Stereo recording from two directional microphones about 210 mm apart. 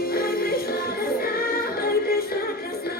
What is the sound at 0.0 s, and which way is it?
Music, 45° left (ahead or behind).